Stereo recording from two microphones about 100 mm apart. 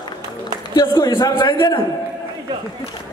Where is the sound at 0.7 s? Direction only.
40° left (ahead or behind).